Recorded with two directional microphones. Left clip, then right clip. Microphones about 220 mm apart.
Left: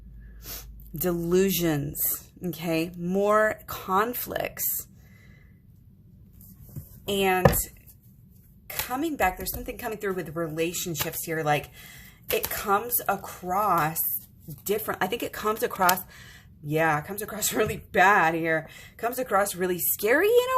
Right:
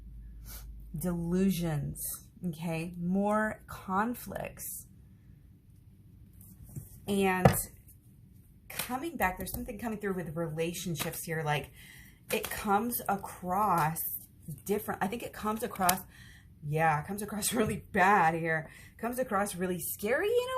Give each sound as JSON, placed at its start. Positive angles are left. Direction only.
{"t": 1.0, "sound": "speech", "side_deg": 45}
{"t": 7.1, "sound": "speech", "side_deg": 35}
{"t": 9.0, "sound": "speech", "side_deg": 35}